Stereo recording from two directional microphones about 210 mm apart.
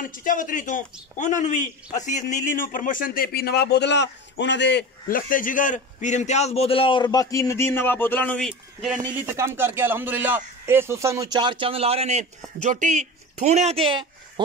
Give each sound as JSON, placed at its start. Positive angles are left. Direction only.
{"t": 0.0, "sound": "speech", "side_deg": 40}
{"t": 9.1, "sound": "a man's voice", "side_deg": -10}